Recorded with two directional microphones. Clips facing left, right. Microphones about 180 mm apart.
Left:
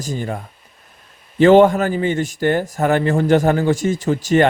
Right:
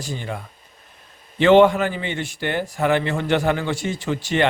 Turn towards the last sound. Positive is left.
turn(degrees=40)  # may be behind; listen again after turning